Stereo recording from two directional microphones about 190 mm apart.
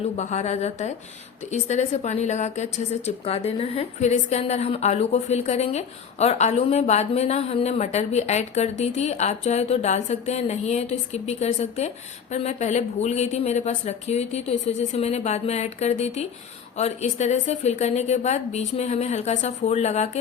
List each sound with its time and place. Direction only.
0.2 s a woman's voice: 35° left (ahead or behind)